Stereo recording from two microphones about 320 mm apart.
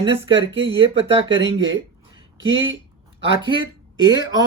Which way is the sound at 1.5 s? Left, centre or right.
Centre.